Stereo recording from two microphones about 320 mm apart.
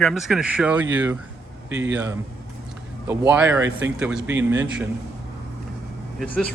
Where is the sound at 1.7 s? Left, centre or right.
Right.